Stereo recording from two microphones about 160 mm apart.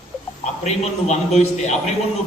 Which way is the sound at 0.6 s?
45° left (ahead or behind).